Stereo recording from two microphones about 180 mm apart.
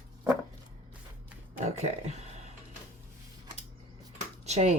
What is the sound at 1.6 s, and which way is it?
Speech, 35° right (ahead or behind).